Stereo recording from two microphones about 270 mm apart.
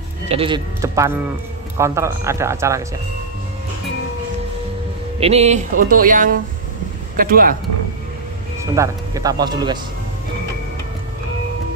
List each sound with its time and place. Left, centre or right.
0.3 s speech: centre
5.2 s speech: right
8.7 s speech: centre